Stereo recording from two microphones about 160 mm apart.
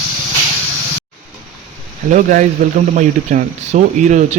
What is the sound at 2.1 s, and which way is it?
A man's voice, 50° right (ahead or behind).